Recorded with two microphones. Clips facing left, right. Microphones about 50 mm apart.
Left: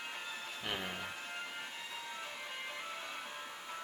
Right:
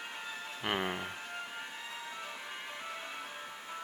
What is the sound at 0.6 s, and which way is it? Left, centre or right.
Speech, right.